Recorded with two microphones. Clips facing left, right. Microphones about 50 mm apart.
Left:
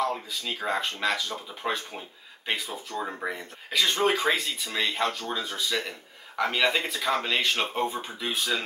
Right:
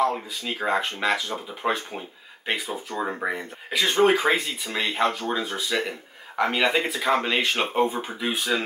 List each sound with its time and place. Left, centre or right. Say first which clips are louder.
0.0 s speech: right 4 dB; right